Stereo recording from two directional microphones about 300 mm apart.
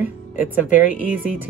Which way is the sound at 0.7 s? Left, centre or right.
Left.